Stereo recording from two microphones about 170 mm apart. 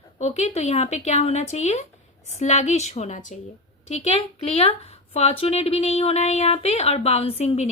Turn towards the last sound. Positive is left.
turn(degrees=40)  # may be behind; listen again after turning